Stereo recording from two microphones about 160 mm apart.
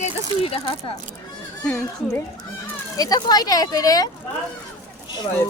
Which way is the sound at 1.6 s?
5° left (ahead or behind).